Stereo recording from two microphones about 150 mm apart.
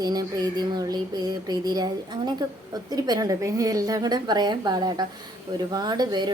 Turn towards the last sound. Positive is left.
turn(degrees=-30)  # may be behind; listen again after turning